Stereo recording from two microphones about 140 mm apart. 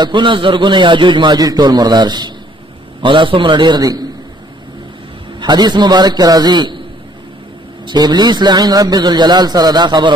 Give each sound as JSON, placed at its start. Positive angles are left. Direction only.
{"t": 0.0, "sound": "a man's voice", "side_deg": -35}
{"t": 5.4, "sound": "a man's voice", "side_deg": -30}
{"t": 7.8, "sound": "a man's voice", "side_deg": -30}